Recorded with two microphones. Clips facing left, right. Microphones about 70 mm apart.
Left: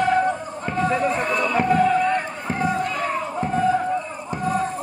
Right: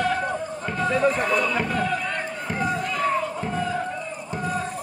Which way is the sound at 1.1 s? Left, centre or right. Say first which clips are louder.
Left 1 dB; centre.